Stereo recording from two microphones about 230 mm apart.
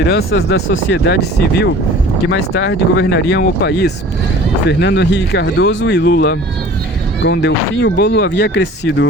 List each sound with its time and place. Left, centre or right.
0.1 s speech: left